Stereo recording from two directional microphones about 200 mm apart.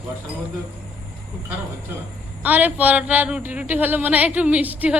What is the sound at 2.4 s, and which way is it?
Speech, 10° right (ahead or behind).